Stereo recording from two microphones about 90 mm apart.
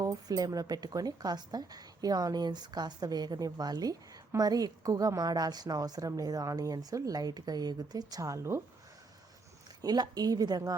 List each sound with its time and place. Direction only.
0.0 s a woman's voice: 45° right (ahead or behind)
9.8 s a woman's voice: 50° right (ahead or behind)